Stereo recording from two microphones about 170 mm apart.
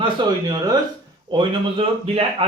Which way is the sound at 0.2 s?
25° right (ahead or behind).